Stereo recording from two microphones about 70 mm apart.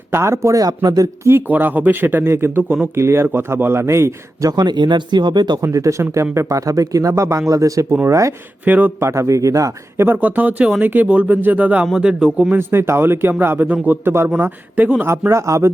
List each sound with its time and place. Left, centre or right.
0.1 s speech: right
1.2 s a man's voice: right
4.4 s speech: right
5.6 s speech: right
8.6 s a man's voice: right
9.0 s speech: right
10.2 s a man's voice: right
12.5 s a man's voice: right
14.3 s a man's voice: right
15.3 s speech: right